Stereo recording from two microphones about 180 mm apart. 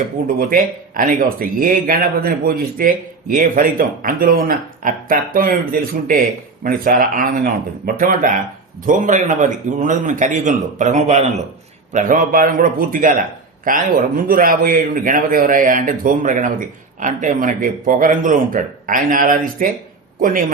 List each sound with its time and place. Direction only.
0.3 s a man's voice: 50° right (ahead or behind)
6.7 s a man's voice: 50° right (ahead or behind)